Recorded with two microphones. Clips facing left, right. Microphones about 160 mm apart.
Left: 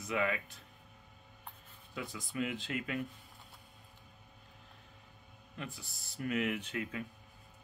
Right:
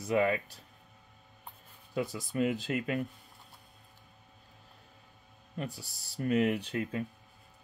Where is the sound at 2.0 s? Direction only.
40° right (ahead or behind).